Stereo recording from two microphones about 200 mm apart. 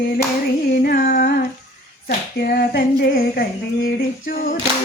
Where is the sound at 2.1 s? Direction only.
50° left (ahead or behind).